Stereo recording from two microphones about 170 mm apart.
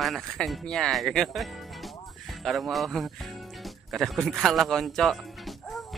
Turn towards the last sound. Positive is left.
turn(degrees=0)  # may be behind; listen again after turning